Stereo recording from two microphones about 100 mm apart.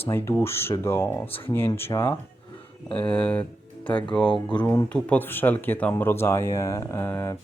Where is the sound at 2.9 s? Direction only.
10° left (ahead or behind); by 7.0 s 30° left (ahead or behind).